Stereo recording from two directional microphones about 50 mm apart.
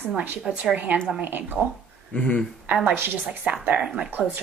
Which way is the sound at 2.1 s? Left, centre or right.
Left.